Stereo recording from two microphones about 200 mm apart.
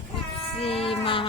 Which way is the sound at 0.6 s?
30° left (ahead or behind).